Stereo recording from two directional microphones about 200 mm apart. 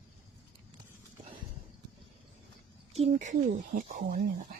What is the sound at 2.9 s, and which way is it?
Speech, 35° right (ahead or behind).